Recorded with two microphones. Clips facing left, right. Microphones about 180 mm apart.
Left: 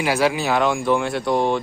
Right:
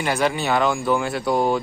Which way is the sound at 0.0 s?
5° left (ahead or behind).